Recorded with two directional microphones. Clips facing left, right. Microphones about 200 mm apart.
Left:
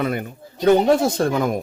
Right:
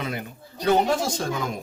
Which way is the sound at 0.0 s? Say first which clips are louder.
Left 8 dB; 55° left (ahead or behind).